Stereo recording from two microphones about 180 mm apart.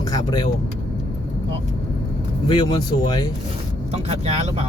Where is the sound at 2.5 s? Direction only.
25° left (ahead or behind).